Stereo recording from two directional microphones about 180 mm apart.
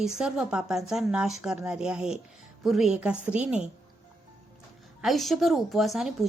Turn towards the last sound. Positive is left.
turn(degrees=0)  # may be behind; listen again after turning